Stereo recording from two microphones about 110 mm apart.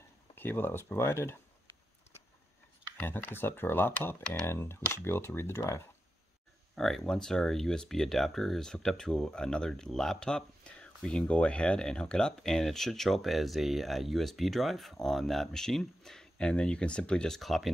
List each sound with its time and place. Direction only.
0.4 s speech: 20° left (ahead or behind)
3.0 s speech: 20° left (ahead or behind)
6.7 s speech: 5° left (ahead or behind)